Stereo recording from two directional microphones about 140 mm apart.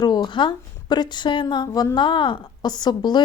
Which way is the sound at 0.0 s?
30° left (ahead or behind).